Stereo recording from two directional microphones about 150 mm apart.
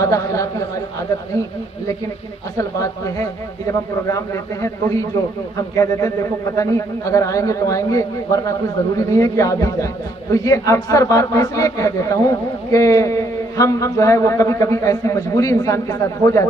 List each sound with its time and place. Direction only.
0.0 s a man's voice: 20° left (ahead or behind)
2.6 s a man's voice: 20° left (ahead or behind)
4.6 s a man's voice: 20° left (ahead or behind)